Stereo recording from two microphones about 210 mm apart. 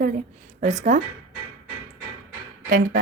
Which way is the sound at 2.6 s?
45° right (ahead or behind).